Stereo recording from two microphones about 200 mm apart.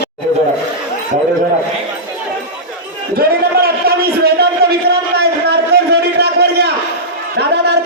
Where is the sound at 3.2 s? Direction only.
50° right (ahead or behind).